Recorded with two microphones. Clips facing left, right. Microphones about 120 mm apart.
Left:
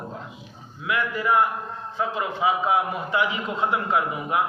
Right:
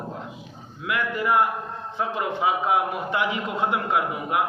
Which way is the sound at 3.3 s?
60° right (ahead or behind).